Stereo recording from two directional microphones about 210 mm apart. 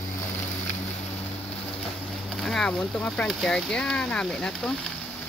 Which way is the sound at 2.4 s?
5° left (ahead or behind).